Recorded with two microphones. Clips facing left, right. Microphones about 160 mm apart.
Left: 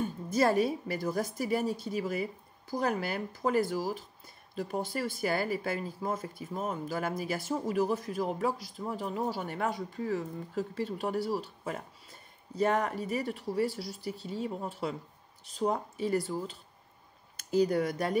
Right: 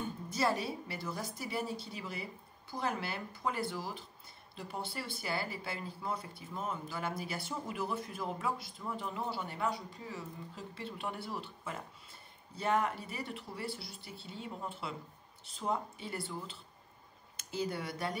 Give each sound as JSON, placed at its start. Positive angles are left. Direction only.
{"t": 0.3, "sound": "speech", "side_deg": 45}
{"t": 17.6, "sound": "speech", "side_deg": 45}